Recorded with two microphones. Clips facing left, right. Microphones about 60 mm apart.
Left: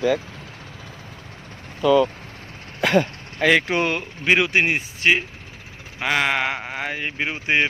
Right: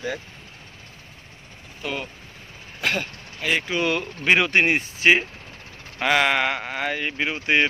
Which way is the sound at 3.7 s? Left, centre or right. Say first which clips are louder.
Left 3 dB; left.